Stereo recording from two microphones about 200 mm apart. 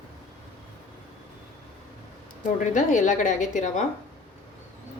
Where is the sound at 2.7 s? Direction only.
40° left (ahead or behind).